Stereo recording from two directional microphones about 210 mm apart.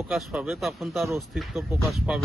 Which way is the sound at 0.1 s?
5° right (ahead or behind).